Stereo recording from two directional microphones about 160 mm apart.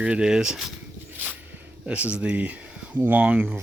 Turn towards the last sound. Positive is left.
turn(degrees=-5)  # may be behind; listen again after turning